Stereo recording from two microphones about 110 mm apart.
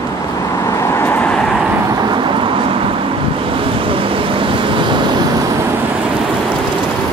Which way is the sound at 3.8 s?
55° right (ahead or behind).